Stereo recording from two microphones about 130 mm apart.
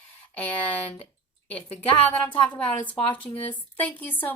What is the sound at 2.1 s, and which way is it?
Speech, 10° left (ahead or behind).